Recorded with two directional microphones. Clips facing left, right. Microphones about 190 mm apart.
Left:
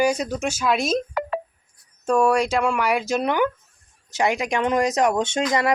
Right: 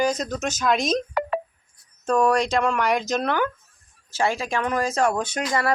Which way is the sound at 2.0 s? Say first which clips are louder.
Left 1 dB; 10° left (ahead or behind).